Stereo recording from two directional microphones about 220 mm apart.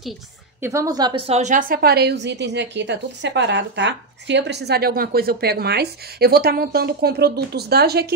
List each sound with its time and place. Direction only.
0.6 s a woman's voice: 15° right (ahead or behind); by 8.1 s 45° right (ahead or behind)